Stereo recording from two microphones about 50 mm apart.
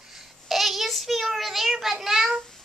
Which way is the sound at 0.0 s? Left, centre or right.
Centre.